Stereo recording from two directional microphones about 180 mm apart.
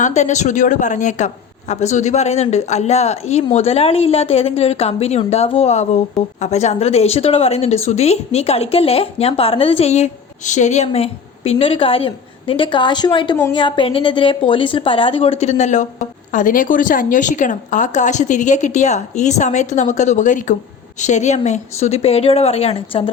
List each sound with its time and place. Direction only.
0.0 s a woman's voice: 40° left (ahead or behind)